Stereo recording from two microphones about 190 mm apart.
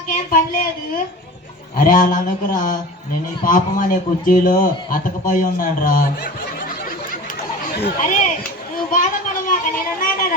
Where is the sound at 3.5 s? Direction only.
45° left (ahead or behind).